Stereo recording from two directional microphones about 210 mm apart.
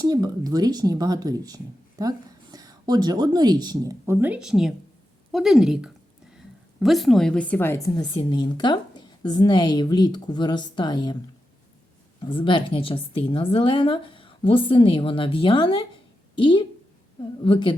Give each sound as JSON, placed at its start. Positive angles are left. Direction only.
{"t": 0.0, "sound": "a woman's voice", "side_deg": -20}
{"t": 12.3, "sound": "a woman's voice", "side_deg": 25}